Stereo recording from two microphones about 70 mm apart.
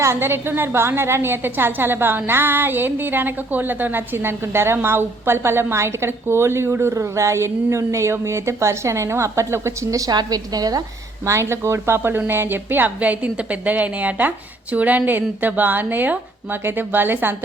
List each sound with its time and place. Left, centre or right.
0.0 s a woman's voice: right
10.1 s a woman's voice: right
11.3 s a woman's voice: right